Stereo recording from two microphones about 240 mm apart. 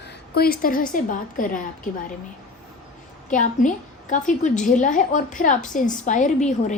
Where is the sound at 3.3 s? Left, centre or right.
Left.